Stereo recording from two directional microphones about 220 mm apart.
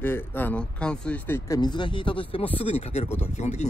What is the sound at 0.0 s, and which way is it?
Speech, 10° left (ahead or behind).